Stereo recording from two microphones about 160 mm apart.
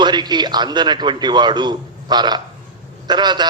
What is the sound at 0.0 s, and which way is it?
A man's voice, 25° right (ahead or behind).